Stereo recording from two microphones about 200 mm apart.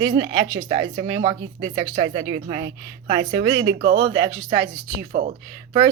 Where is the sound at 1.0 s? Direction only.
25° right (ahead or behind).